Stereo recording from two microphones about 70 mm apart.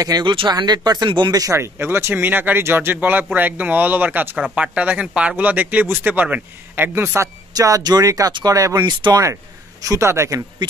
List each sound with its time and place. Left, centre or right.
0.0 s speech: right
1.5 s speech: right
7.0 s speech: right
7.5 s speech: right
8.3 s speech: right
8.5 s speech: right
8.8 s speech: right
9.2 s speech: right